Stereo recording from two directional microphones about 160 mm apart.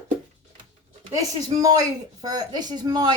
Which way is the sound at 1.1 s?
20° right (ahead or behind).